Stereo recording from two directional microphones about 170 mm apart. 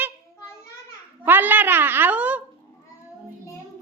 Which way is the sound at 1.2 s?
10° right (ahead or behind).